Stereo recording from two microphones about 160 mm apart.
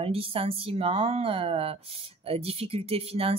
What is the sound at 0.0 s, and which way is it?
Speech, 35° right (ahead or behind).